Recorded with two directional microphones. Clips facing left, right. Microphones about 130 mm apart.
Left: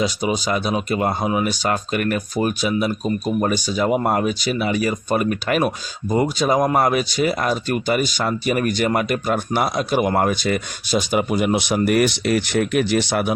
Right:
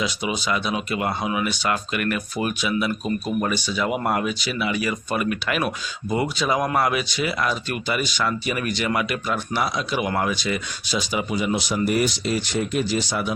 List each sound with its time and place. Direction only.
0.0 s speech: 40° left (ahead or behind); by 13.3 s 60° left (ahead or behind)